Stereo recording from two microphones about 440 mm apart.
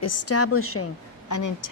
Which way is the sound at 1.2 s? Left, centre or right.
Left.